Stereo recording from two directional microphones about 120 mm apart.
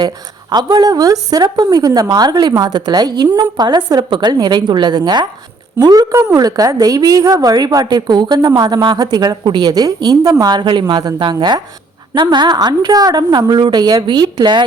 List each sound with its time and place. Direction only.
0.5 s a woman's voice: 35° right (ahead or behind)